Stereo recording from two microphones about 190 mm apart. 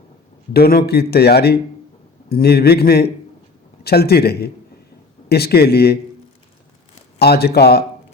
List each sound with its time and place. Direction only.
0.5 s a man's voice: 55° left (ahead or behind)
7.2 s a man's voice: 55° left (ahead or behind)